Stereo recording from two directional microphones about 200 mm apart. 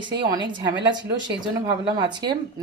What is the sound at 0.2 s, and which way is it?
A woman's voice, 20° right (ahead or behind).